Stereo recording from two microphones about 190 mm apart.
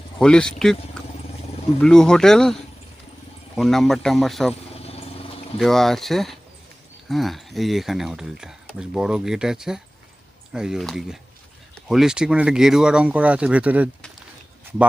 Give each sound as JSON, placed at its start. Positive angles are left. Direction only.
{"t": 0.2, "sound": "speech", "side_deg": 5}
{"t": 4.7, "sound": "vehicle", "side_deg": 30}
{"t": 5.5, "sound": "speech", "side_deg": 0}